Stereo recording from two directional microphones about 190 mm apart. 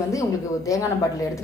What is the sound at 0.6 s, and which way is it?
Speech, 15° left (ahead or behind).